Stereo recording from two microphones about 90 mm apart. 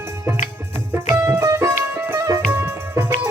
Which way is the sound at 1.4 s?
35° right (ahead or behind).